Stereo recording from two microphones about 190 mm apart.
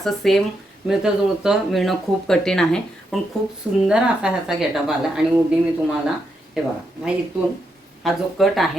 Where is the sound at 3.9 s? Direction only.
5° right (ahead or behind).